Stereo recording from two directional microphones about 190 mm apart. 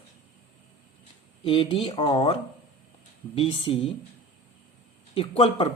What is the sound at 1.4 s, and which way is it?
Speech, 25° left (ahead or behind).